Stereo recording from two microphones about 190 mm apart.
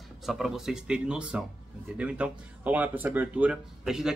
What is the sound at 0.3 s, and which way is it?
Speech, centre (ahead or behind).